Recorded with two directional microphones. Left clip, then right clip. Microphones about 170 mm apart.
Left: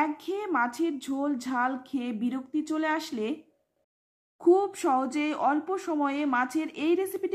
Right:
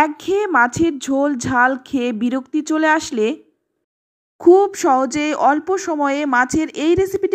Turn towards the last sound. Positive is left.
turn(degrees=-35)  # may be behind; listen again after turning